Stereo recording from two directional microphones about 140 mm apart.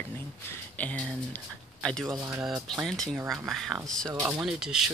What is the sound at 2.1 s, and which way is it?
Speech, 25° right (ahead or behind).